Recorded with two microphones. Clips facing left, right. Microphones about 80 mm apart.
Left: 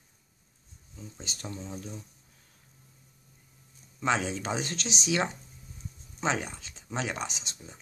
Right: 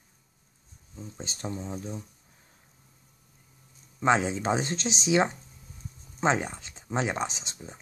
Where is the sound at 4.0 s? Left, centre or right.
Right.